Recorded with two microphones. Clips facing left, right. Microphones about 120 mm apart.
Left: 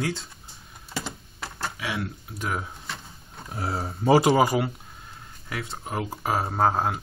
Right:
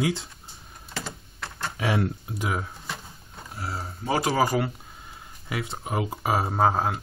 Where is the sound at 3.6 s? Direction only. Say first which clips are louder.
Left 4 dB; 50° left (ahead or behind).